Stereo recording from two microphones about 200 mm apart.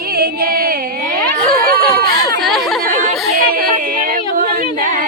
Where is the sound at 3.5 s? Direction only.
45° right (ahead or behind).